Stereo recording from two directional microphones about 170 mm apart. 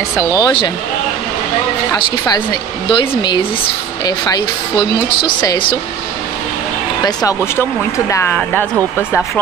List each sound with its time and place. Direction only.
0.2 s speech: 20° left (ahead or behind)
2.9 s speech: 30° left (ahead or behind)
8.1 s speech: 10° left (ahead or behind)